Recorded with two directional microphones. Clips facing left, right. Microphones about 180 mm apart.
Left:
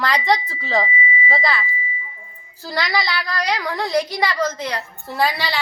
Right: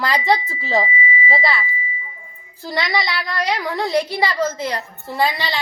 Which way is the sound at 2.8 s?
Centre (ahead or behind).